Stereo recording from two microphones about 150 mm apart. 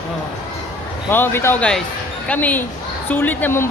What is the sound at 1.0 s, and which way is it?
Speech, 15° left (ahead or behind).